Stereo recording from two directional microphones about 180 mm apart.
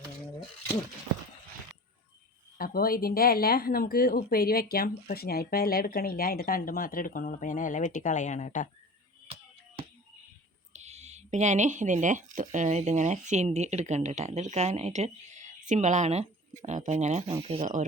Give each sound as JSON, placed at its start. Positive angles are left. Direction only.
{"t": 2.6, "sound": "speech", "side_deg": 55}
{"t": 10.7, "sound": "speech", "side_deg": -40}